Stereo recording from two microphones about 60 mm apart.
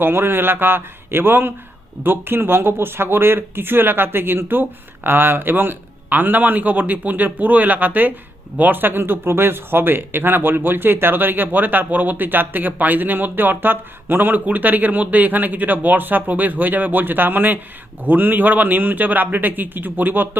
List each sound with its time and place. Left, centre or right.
0.0 s a man's voice: right